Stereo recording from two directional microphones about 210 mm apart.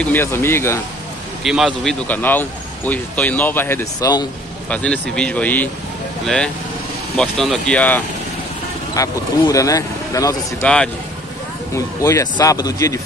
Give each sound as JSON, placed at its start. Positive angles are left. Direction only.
{"t": 0.0, "sound": "speech", "side_deg": 10}
{"t": 1.4, "sound": "speech", "side_deg": 0}
{"t": 4.6, "sound": "speech", "side_deg": 5}
{"t": 11.7, "sound": "speech", "side_deg": 15}